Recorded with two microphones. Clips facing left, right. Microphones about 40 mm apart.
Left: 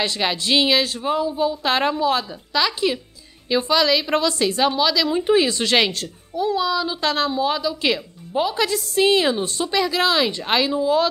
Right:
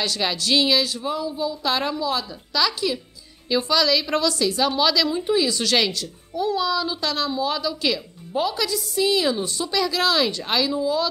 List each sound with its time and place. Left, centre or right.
0.0 s a woman's voice: left
4.7 s speech: centre
5.1 s a woman's voice: left
6.3 s a child's voice: centre
7.0 s a woman's voice: left
8.3 s speech: centre
8.5 s a woman's voice: left